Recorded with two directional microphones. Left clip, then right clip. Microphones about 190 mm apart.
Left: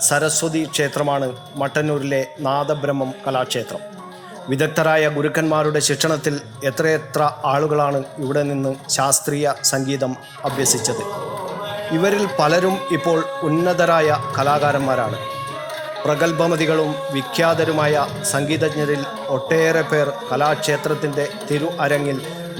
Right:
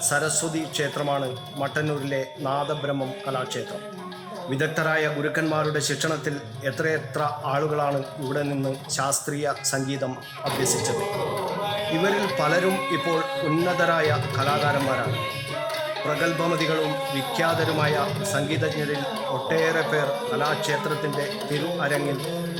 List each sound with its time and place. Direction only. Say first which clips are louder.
0.0 s a man's voice: left 6 dB; 20° left (ahead or behind)
12.0 s a man's voice: left 7 dB; 20° left (ahead or behind)
16.0 s a man's voice: left 8 dB; 25° left (ahead or behind)